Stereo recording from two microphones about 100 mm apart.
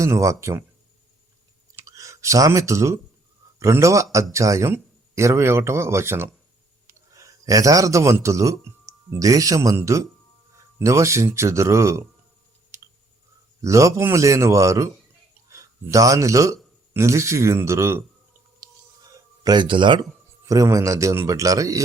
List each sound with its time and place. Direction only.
0.0 s a man's voice: 30° right (ahead or behind)
1.7 s clicking: 30° right (ahead or behind)
3.6 s speech: 30° right (ahead or behind)
13.6 s a man's voice: 30° right (ahead or behind)
18.6 s whispering: 40° right (ahead or behind)
19.1 s speech: 40° right (ahead or behind)
20.4 s a man's voice: 35° right (ahead or behind)